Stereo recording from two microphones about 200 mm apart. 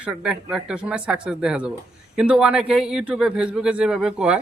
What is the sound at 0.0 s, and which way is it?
A man's voice, 5° right (ahead or behind).